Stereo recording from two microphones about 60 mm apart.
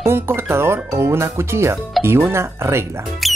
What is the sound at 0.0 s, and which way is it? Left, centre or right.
Speech, right.